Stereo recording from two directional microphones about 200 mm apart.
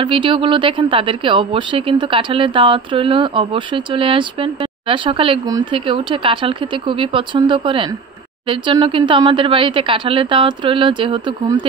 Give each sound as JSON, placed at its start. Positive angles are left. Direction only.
{"t": 0.0, "sound": "speech", "side_deg": -25}